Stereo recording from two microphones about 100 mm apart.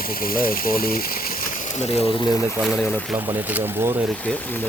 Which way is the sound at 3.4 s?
15° right (ahead or behind).